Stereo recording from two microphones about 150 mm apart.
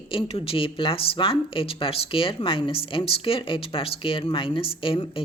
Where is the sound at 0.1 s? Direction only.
40° left (ahead or behind).